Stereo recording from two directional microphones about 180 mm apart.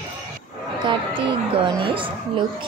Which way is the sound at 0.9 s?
30° right (ahead or behind).